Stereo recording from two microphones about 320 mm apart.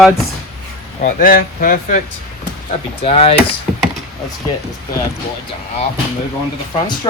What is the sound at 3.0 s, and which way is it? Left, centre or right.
Speech, centre.